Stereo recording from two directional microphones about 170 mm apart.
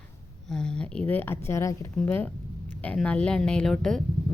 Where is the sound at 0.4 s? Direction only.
5° left (ahead or behind).